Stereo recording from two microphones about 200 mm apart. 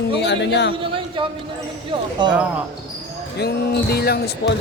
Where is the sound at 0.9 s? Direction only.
25° right (ahead or behind).